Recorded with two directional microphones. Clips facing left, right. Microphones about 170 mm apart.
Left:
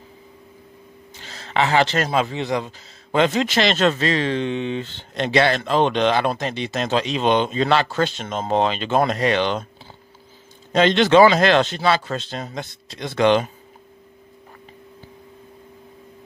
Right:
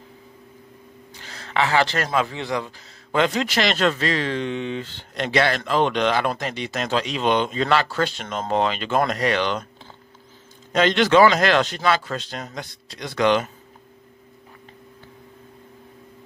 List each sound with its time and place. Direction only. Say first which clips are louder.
1.2 s speech: left 2 dB; 25° left (ahead or behind)
10.7 s speech: left 2 dB; 25° left (ahead or behind)